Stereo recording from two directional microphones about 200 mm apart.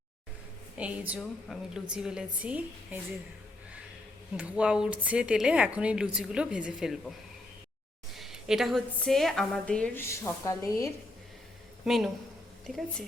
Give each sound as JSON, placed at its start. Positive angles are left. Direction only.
{"t": 0.8, "sound": "a woman's voice", "side_deg": -5}
{"t": 4.4, "sound": "a woman's voice", "side_deg": -5}
{"t": 8.1, "sound": "a woman's voice", "side_deg": 0}
{"t": 11.9, "sound": "a woman's voice", "side_deg": 0}